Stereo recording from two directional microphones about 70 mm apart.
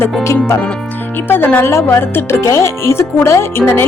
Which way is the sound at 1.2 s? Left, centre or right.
Left.